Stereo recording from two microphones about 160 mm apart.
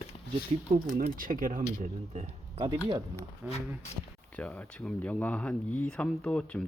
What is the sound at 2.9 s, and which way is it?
Speech, 25° right (ahead or behind).